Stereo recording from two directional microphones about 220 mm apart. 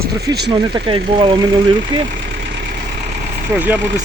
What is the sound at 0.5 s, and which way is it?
Speech, 25° right (ahead or behind).